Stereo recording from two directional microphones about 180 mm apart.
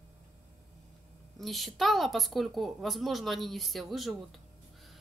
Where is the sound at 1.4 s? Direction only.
Centre (ahead or behind).